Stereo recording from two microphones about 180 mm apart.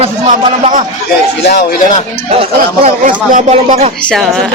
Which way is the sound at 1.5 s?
60° left (ahead or behind).